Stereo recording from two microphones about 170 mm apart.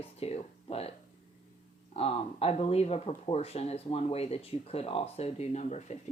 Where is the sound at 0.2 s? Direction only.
35° left (ahead or behind).